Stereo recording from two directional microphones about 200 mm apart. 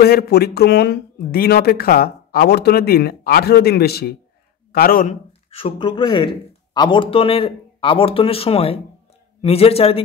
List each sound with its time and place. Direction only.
0.0 s speech: 50° left (ahead or behind)
5.5 s speech: 25° left (ahead or behind)